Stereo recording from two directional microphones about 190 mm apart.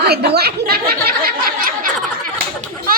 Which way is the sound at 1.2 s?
50° right (ahead or behind).